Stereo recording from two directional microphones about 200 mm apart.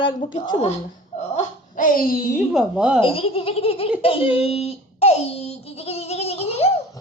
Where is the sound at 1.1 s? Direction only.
40° left (ahead or behind).